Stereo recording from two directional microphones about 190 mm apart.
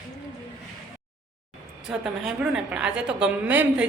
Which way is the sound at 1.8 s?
5° right (ahead or behind).